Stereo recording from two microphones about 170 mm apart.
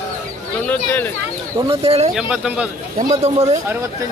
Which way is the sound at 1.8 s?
35° right (ahead or behind).